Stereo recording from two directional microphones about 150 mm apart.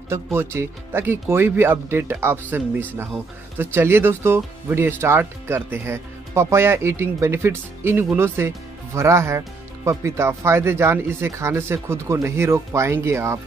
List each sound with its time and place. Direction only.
0.1 s speech: 15° right (ahead or behind)